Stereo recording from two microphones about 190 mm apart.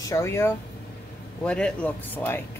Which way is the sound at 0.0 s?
15° left (ahead or behind).